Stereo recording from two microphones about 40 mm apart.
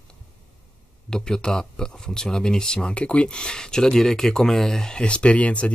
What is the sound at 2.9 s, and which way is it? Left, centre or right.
Speech, left.